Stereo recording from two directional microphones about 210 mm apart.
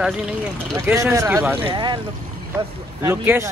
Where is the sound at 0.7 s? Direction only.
10° right (ahead or behind).